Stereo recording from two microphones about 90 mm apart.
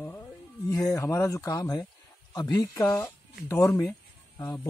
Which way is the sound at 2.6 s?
35° left (ahead or behind).